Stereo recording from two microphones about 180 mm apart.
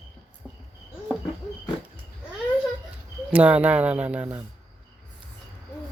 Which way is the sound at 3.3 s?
5° right (ahead or behind).